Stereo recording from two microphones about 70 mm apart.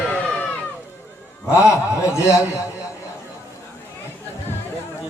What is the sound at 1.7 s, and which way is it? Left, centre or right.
Speech, left.